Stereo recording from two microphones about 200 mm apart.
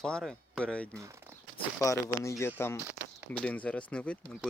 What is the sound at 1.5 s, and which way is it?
Speech, 15° left (ahead or behind).